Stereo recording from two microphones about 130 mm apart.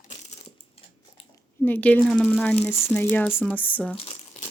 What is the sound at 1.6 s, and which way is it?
Speech, 15° left (ahead or behind).